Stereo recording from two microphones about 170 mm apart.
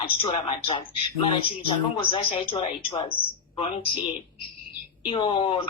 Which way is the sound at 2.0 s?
30° left (ahead or behind).